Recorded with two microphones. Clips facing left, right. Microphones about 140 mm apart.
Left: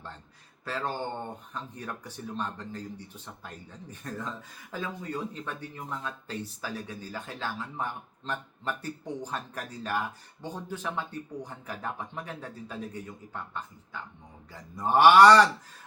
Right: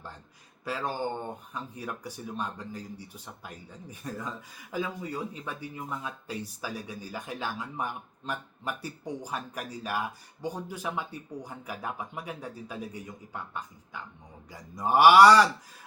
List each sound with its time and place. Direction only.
0.6 s speech: 10° right (ahead or behind)